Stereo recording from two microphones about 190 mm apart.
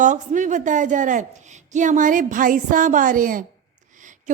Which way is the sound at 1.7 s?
40° right (ahead or behind).